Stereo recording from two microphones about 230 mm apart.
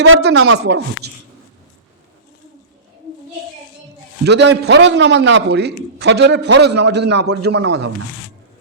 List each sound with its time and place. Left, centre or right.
0.0 s a man's voice: right
4.3 s a man's voice: right